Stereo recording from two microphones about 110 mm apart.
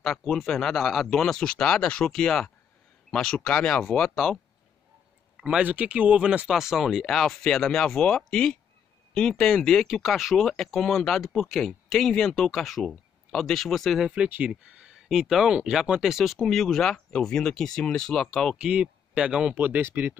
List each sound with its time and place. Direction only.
0.0 s speech: 5° left (ahead or behind)
5.4 s speech: 10° right (ahead or behind)
18.7 s speech: 10° right (ahead or behind)
19.5 s speech: 15° right (ahead or behind)